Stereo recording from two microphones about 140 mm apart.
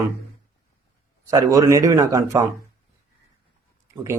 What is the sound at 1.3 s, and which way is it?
A man's voice, 25° right (ahead or behind).